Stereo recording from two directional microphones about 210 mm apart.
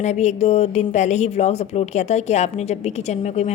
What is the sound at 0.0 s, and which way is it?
A woman's voice, 35° left (ahead or behind).